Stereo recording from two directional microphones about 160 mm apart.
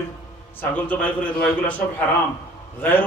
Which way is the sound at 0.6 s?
10° left (ahead or behind).